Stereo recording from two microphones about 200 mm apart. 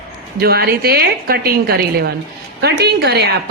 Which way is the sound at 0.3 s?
50° right (ahead or behind).